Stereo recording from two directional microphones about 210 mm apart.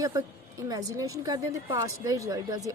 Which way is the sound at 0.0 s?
20° right (ahead or behind).